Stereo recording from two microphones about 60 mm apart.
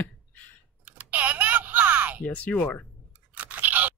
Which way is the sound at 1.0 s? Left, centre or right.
Right.